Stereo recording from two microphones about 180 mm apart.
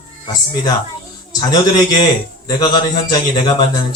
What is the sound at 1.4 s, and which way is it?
A man's voice, 25° left (ahead or behind).